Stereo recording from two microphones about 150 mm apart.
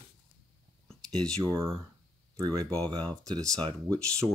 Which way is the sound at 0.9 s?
5° left (ahead or behind).